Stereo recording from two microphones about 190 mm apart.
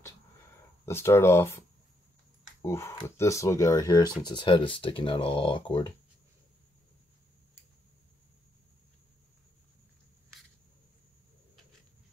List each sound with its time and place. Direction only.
0.8 s speech: 15° left (ahead or behind)
2.6 s speech: 15° left (ahead or behind)